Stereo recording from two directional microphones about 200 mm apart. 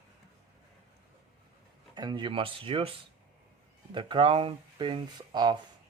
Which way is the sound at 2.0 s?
20° right (ahead or behind).